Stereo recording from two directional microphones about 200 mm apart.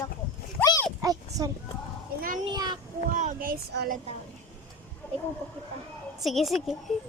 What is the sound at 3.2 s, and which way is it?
Speech, 40° right (ahead or behind).